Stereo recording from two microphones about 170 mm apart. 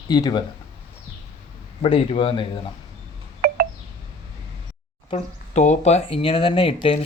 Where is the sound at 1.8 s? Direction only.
35° left (ahead or behind).